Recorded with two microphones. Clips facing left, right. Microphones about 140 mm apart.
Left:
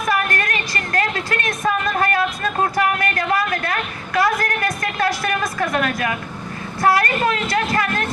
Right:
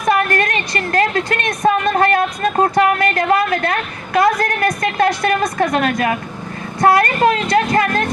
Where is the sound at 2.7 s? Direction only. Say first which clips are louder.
Right 5 dB; 20° right (ahead or behind).